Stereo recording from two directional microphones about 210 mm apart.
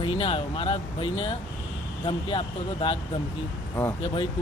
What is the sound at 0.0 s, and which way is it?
Speech, 25° left (ahead or behind).